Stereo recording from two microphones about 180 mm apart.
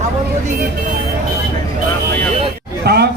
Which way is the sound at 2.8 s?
65° right (ahead or behind).